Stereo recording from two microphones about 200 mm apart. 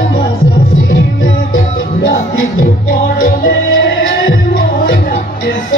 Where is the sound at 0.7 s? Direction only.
90° left.